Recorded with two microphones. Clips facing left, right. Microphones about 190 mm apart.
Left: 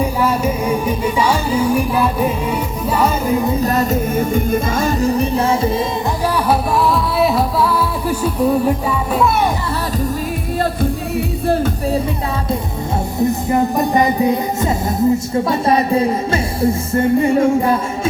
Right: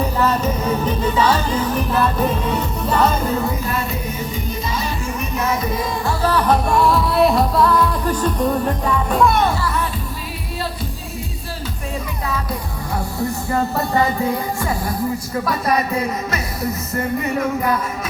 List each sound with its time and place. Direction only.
0.0 s music: 10° left (ahead or behind)
3.6 s music: 40° left (ahead or behind)
6.2 s music: 10° left (ahead or behind)
11.4 s music: 55° left (ahead or behind)
11.9 s music: 30° left (ahead or behind)
13.1 s music: 20° left (ahead or behind)